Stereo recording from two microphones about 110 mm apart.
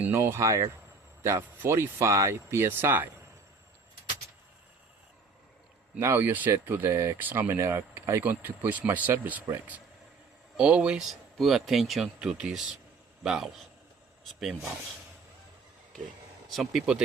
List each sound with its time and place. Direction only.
0.0 s speech: 25° right (ahead or behind)
6.0 s speech: 25° right (ahead or behind); by 13.5 s 5° right (ahead or behind)
16.5 s speech: centre (ahead or behind)